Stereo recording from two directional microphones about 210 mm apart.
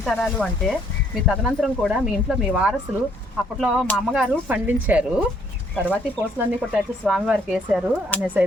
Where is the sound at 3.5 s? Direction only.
Centre (ahead or behind).